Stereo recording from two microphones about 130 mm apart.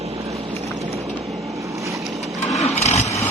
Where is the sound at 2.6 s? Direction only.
55° left (ahead or behind).